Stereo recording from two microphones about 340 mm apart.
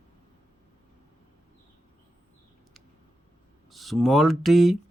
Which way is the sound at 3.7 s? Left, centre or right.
Centre.